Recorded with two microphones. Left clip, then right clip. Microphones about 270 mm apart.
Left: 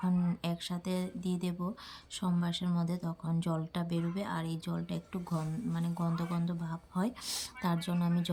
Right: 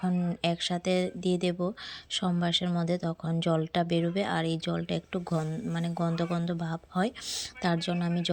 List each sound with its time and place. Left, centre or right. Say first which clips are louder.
0.4 s speech: right 10 dB; centre